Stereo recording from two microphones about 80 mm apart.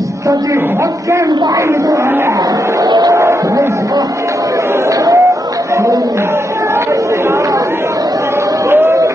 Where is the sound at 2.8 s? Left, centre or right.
Right.